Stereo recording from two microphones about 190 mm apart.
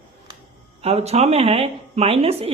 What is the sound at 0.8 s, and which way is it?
Speech, 35° right (ahead or behind).